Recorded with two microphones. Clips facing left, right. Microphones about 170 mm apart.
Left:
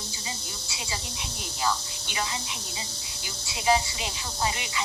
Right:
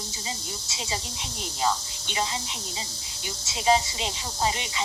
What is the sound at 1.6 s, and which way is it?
Speech, 25° right (ahead or behind).